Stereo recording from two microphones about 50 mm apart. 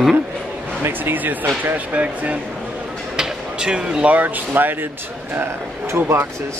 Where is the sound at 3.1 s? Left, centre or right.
Centre.